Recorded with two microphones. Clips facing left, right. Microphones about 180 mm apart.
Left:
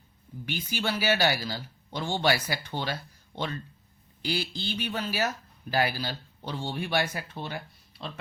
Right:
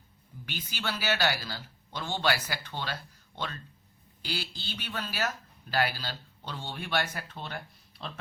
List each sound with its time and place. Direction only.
0.4 s a man's voice: 15° left (ahead or behind)